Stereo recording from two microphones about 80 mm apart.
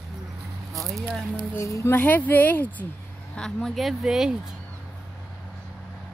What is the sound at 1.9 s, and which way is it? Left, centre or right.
Speech, left.